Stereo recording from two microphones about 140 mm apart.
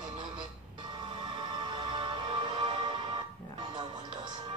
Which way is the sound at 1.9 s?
35° right (ahead or behind).